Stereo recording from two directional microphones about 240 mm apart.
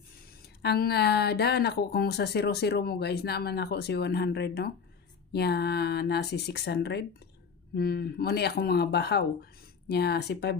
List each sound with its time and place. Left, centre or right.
0.6 s speech: left